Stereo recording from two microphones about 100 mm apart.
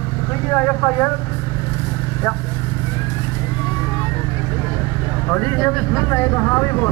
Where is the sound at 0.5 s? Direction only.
20° left (ahead or behind).